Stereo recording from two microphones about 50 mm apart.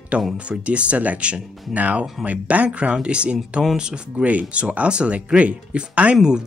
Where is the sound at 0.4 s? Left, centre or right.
Right.